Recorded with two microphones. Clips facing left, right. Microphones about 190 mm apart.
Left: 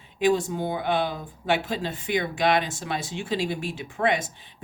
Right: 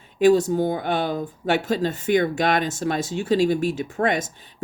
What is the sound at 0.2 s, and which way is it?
Speech, 40° right (ahead or behind).